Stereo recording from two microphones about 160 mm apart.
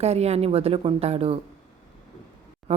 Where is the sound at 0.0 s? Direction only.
40° right (ahead or behind).